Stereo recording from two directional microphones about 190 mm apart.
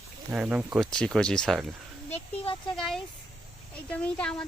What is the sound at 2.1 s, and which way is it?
Speech, 30° left (ahead or behind).